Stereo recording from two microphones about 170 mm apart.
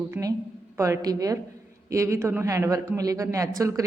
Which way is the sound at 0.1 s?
20° right (ahead or behind).